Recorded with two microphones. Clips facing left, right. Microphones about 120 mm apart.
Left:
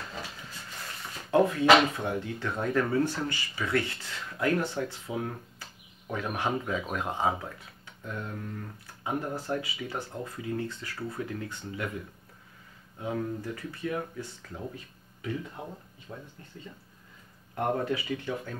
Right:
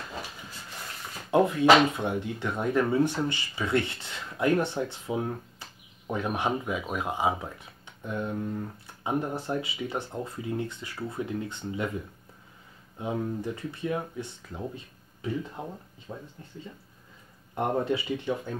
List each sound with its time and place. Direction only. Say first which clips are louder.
1.3 s speech: right 1 dB; 15° right (ahead or behind)
13.0 s speech: right 2 dB; 20° right (ahead or behind)
16.1 s speech: right 3 dB; 30° right (ahead or behind)
17.6 s speech: right 2 dB; 20° right (ahead or behind)